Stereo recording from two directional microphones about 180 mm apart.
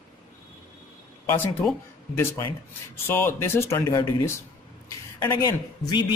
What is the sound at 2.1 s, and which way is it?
A man's voice, 15° left (ahead or behind).